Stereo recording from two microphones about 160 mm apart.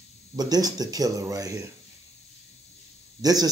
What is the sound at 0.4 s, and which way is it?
Speech, 25° right (ahead or behind).